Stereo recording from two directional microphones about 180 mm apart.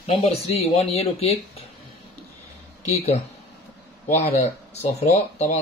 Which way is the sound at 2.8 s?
35° left (ahead or behind).